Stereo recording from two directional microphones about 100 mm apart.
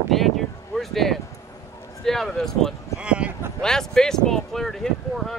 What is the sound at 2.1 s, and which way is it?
Speech, 5° left (ahead or behind).